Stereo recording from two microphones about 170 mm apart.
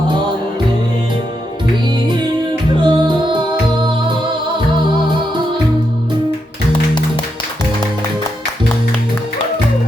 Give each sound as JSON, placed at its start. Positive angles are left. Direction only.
{"t": 2.8, "sound": "music", "side_deg": -25}